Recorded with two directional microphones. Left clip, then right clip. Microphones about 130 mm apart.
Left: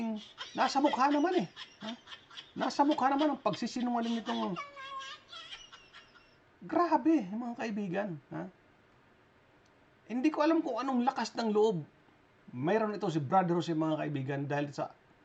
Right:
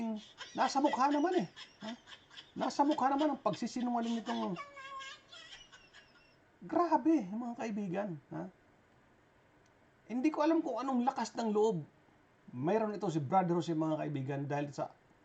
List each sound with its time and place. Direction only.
0.0 s a man's voice: 5° right (ahead or behind)
10.1 s a man's voice: centre (ahead or behind)